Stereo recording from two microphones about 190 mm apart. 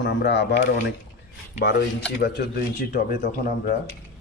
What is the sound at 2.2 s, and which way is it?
Speech, 55° left (ahead or behind).